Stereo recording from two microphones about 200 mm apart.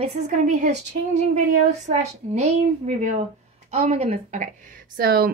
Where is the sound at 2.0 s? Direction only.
35° right (ahead or behind).